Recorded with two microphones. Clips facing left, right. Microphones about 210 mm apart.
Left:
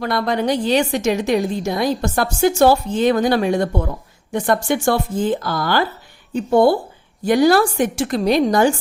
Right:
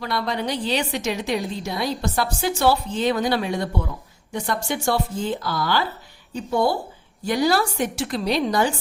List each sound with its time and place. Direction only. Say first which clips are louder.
0.0 s a woman's voice: left 6 dB; 50° left (ahead or behind)